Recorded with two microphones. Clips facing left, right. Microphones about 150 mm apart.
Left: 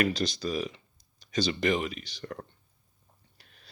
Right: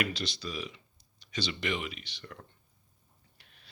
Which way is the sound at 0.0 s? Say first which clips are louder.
Left 6 dB; 45° left (ahead or behind).